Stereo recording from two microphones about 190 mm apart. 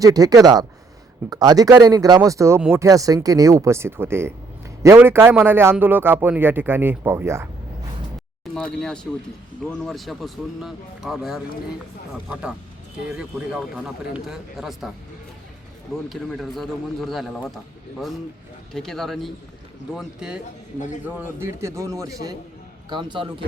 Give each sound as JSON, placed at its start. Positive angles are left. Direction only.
{"t": 0.0, "sound": "speech", "side_deg": -20}
{"t": 8.5, "sound": "a man's voice", "side_deg": 5}
{"t": 16.0, "sound": "a man's voice", "side_deg": 0}
{"t": 18.7, "sound": "a man's voice", "side_deg": 0}